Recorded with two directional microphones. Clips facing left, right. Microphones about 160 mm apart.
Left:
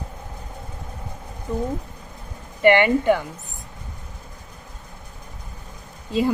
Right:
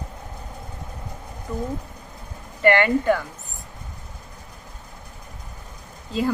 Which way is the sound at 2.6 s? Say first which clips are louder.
Left 2 dB; 20° left (ahead or behind).